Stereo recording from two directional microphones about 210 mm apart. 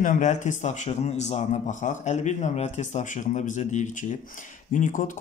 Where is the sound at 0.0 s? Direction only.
35° left (ahead or behind).